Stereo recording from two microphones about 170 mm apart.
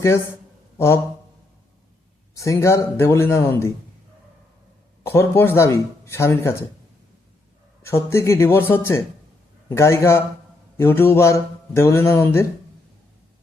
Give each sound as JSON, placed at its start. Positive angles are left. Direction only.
{"t": 2.3, "sound": "a man's voice", "side_deg": 20}
{"t": 5.0, "sound": "a man's voice", "side_deg": 15}
{"t": 7.8, "sound": "a man's voice", "side_deg": 15}